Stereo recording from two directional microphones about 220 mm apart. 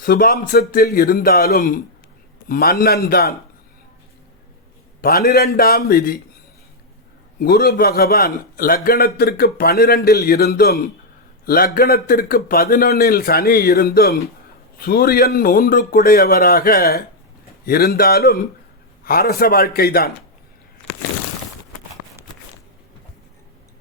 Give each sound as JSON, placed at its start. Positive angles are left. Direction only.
{"t": 0.0, "sound": "a man's voice", "side_deg": 45}
{"t": 4.9, "sound": "a man's voice", "side_deg": 45}
{"t": 7.3, "sound": "a man's voice", "side_deg": 45}